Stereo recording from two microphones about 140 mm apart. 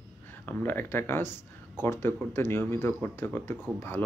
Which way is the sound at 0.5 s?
15° left (ahead or behind).